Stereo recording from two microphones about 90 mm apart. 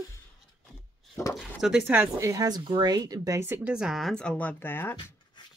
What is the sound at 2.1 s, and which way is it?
Speech, 35° right (ahead or behind).